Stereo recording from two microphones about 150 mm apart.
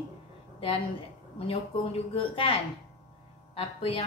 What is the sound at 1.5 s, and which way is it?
A woman's voice, 40° left (ahead or behind).